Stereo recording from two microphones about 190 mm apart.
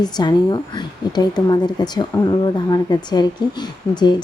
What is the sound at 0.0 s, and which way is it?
A woman's voice, 20° left (ahead or behind).